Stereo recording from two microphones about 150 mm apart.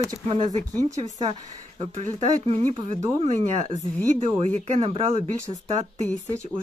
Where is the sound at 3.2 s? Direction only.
50° right (ahead or behind).